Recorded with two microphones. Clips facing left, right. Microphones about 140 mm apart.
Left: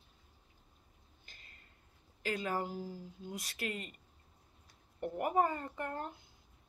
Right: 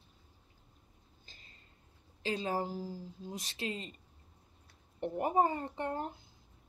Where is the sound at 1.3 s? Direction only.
25° right (ahead or behind).